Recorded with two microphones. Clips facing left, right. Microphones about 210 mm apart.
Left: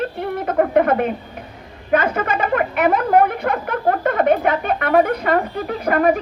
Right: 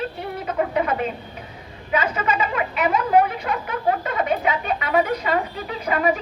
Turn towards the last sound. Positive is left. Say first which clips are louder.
# left 5 dB
turn(degrees=55)  # may be behind; listen again after turning